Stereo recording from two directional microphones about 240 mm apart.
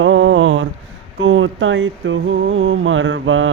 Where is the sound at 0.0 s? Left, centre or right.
Right.